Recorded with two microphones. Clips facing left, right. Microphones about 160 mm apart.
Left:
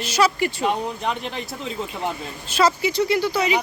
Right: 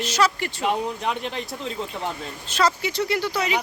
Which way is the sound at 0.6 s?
Centre (ahead or behind).